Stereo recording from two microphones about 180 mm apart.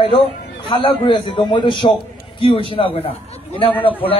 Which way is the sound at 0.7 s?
30° left (ahead or behind).